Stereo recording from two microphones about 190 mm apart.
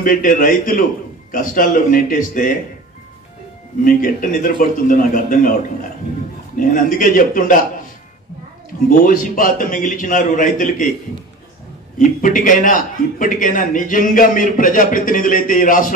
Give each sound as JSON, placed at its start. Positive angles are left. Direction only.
{"t": 0.0, "sound": "a man's voice", "side_deg": 45}
{"t": 3.8, "sound": "a man's voice", "side_deg": 45}
{"t": 6.6, "sound": "a man's voice", "side_deg": 45}
{"t": 9.0, "sound": "a man's voice", "side_deg": 50}
{"t": 12.0, "sound": "a man's voice", "side_deg": 45}